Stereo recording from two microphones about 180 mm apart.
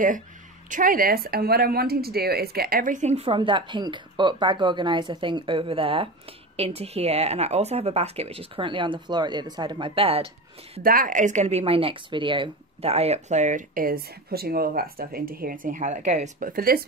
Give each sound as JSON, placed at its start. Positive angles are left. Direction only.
{"t": 0.7, "sound": "speech", "side_deg": -50}
{"t": 10.8, "sound": "speech", "side_deg": -55}